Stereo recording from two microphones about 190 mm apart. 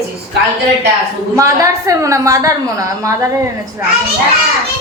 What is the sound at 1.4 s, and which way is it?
A woman's voice, 15° right (ahead or behind).